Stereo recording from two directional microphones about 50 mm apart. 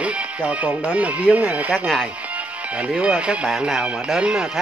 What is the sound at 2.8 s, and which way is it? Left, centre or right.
Speech, right.